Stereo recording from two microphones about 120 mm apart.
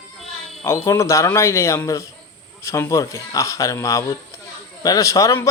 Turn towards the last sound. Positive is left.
turn(degrees=25)  # may be behind; listen again after turning